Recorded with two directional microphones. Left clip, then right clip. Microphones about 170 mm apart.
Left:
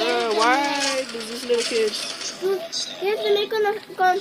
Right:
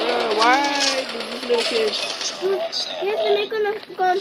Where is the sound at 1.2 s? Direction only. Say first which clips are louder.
Right 3 dB; 5° left (ahead or behind).